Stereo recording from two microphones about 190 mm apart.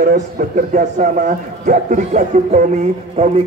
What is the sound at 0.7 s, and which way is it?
A man's voice, 45° right (ahead or behind).